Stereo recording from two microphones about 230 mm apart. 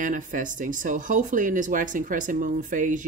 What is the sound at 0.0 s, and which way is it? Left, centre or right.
Speech, right.